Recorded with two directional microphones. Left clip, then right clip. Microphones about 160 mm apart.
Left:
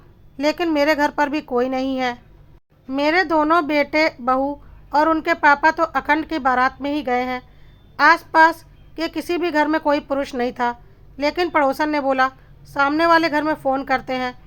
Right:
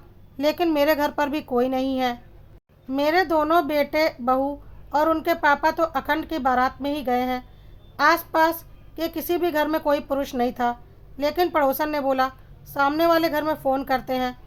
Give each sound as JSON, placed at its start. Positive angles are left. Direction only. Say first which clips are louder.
{"t": 0.3, "sound": "speech", "louder": "left 2 dB", "side_deg": 15}